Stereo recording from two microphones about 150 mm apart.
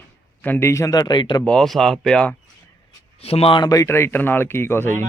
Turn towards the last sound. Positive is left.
turn(degrees=15)  # may be behind; listen again after turning